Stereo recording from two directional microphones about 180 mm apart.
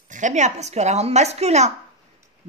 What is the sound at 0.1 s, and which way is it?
A woman's voice, 40° right (ahead or behind).